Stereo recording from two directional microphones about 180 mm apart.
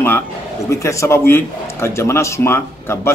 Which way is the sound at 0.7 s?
15° left (ahead or behind).